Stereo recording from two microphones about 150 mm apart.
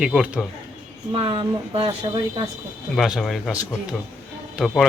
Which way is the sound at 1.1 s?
35° right (ahead or behind).